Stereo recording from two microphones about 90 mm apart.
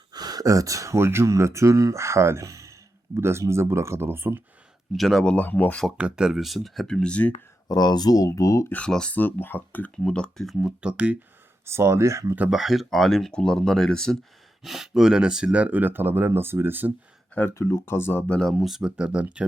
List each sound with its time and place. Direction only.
0.1 s speech: 50° right (ahead or behind); by 4.4 s 25° right (ahead or behind)
4.9 s speech: centre (ahead or behind)
5.2 s speech: 15° left (ahead or behind)
6.0 s speech: 10° right (ahead or behind); by 7.3 s 15° left (ahead or behind)
7.7 s speech: 50° left (ahead or behind)
8.7 s speech: 10° left (ahead or behind)
10.8 s speech: 10° right (ahead or behind)
11.6 s speech: 30° right (ahead or behind)
12.5 s speech: 5° right (ahead or behind)
14.6 s speech: 5° right (ahead or behind); by 16.9 s 20° right (ahead or behind)
17.5 s speech: 35° left (ahead or behind)
18.3 s speech: 5° left (ahead or behind); by 19.5 s 10° right (ahead or behind)